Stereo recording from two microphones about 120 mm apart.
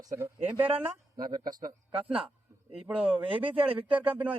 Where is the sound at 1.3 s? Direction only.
35° right (ahead or behind).